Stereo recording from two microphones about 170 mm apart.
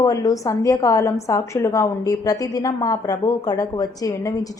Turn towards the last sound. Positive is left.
turn(degrees=20)  # may be behind; listen again after turning